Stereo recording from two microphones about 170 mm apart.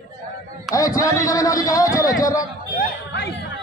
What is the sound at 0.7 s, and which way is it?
A man's voice, 20° left (ahead or behind).